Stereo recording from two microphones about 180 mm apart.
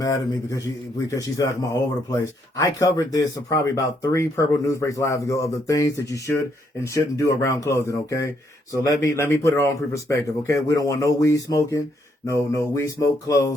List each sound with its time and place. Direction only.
0.0 s speech: 20° left (ahead or behind)